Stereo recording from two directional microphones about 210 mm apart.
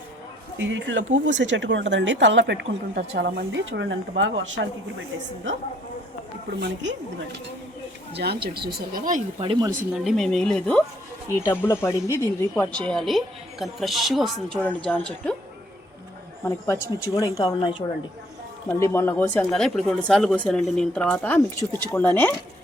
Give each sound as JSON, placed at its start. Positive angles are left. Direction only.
{"t": 0.6, "sound": "speech", "side_deg": -60}
{"t": 8.1, "sound": "speech", "side_deg": -50}
{"t": 8.9, "sound": "speech", "side_deg": -40}
{"t": 9.4, "sound": "speech", "side_deg": -20}
{"t": 9.9, "sound": "speech", "side_deg": 0}
{"t": 16.4, "sound": "speech", "side_deg": 10}
{"t": 18.7, "sound": "speech", "side_deg": 15}